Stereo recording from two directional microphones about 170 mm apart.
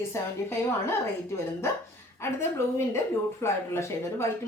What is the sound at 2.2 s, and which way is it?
A woman's voice, 15° left (ahead or behind).